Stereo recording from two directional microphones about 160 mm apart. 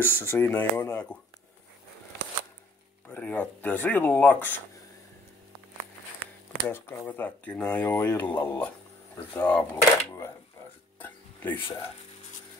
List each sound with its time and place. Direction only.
0.0 s speech: 15° left (ahead or behind)
3.1 s speech: 10° left (ahead or behind)
6.7 s speech: 10° left (ahead or behind)
11.0 s a sound: 10° left (ahead or behind)